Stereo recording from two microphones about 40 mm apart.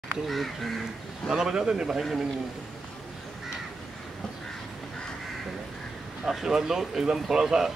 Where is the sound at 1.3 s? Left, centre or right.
Centre.